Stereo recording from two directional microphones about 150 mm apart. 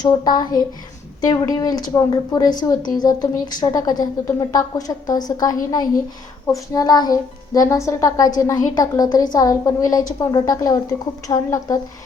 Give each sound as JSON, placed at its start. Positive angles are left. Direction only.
{"t": 0.0, "sound": "a woman's voice", "side_deg": 25}